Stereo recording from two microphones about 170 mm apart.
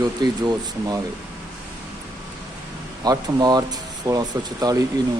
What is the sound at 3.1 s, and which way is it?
Speech, 25° right (ahead or behind).